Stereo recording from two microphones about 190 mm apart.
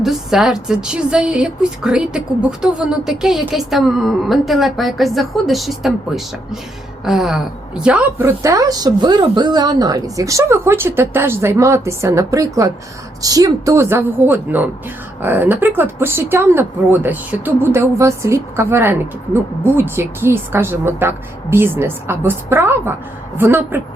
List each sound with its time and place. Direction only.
0.0 s a woman's voice: centre (ahead or behind)
8.4 s speech: 15° right (ahead or behind)